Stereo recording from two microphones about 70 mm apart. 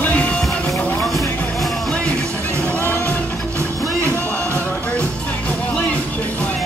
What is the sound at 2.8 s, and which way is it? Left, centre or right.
Music, left.